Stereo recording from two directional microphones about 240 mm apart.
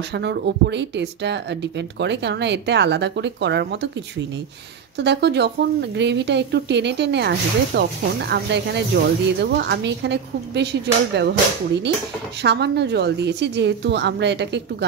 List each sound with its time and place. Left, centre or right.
0.1 s a woman's voice: right
4.9 s a woman's voice: right